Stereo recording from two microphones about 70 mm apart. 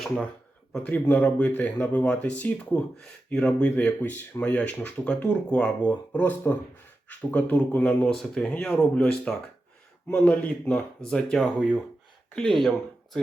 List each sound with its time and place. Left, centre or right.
0.8 s speech: left
11.0 s speech: centre